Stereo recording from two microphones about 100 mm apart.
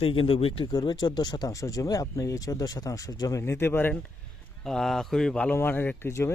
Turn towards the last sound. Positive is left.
turn(degrees=25)  # may be behind; listen again after turning